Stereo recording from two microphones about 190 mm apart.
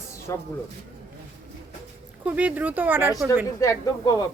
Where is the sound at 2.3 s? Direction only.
5° right (ahead or behind).